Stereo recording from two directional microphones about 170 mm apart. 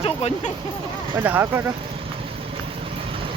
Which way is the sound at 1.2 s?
15° right (ahead or behind).